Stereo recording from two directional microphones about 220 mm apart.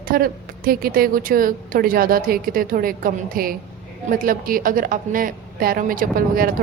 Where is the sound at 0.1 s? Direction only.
40° right (ahead or behind).